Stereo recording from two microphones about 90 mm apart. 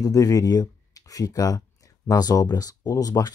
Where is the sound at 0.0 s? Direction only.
40° left (ahead or behind).